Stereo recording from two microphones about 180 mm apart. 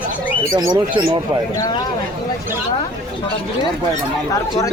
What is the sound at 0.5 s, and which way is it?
Speech, 20° right (ahead or behind).